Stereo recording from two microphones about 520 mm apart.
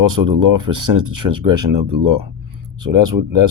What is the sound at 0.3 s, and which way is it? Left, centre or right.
Speech, right.